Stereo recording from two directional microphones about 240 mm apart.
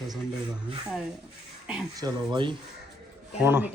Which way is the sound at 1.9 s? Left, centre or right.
Centre.